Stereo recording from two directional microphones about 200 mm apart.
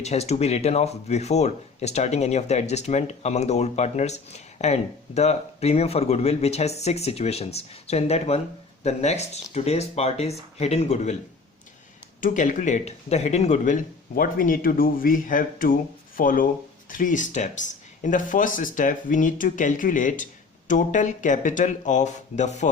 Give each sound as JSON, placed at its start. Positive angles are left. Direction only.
{"t": 0.0, "sound": "speech", "side_deg": 35}
{"t": 12.2, "sound": "speech", "side_deg": 40}